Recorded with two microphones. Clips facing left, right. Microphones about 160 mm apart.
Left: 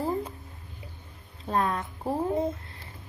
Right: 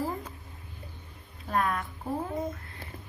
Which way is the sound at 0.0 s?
35° left (ahead or behind).